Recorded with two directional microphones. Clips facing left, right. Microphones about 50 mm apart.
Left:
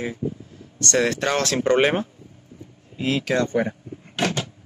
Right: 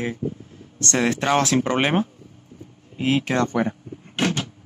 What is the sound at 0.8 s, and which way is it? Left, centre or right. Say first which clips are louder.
Speech: left 1 dB; right.